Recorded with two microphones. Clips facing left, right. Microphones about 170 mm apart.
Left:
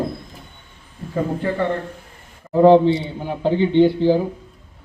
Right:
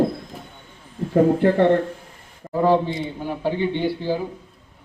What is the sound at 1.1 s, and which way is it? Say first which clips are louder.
Speech: right 6 dB; 60° right (ahead or behind).